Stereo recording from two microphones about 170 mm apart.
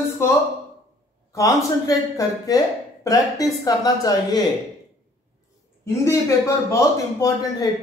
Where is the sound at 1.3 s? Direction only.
20° left (ahead or behind).